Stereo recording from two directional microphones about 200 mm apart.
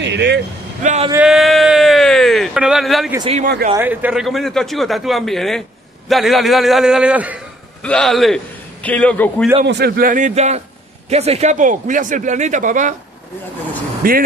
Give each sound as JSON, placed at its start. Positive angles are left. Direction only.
{"t": 0.0, "sound": "vehicle", "side_deg": -60}
{"t": 0.8, "sound": "speech", "side_deg": -35}
{"t": 1.1, "sound": "speech", "side_deg": -5}
{"t": 3.4, "sound": "speech", "side_deg": -50}
{"t": 3.7, "sound": "a man's voice", "side_deg": -10}
{"t": 9.7, "sound": "speech", "side_deg": -50}
{"t": 14.0, "sound": "speech", "side_deg": -45}